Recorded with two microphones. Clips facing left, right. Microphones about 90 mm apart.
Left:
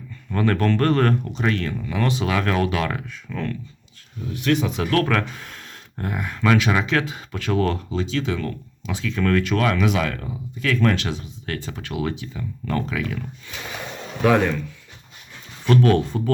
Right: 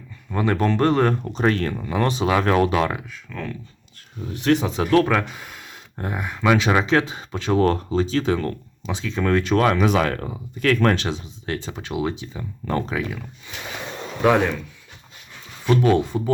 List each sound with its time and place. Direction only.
0.3 s speech: 15° right (ahead or behind)
1.3 s speech: 40° right (ahead or behind)
3.1 s speech: centre (ahead or behind)
4.3 s speech: 30° right (ahead or behind); by 6.7 s 15° right (ahead or behind)
6.7 s speech: 25° right (ahead or behind)
8.9 s speech: 20° right (ahead or behind); by 10.9 s 50° right (ahead or behind)
10.9 s speech: 25° right (ahead or behind)
15.6 s speech: 15° right (ahead or behind)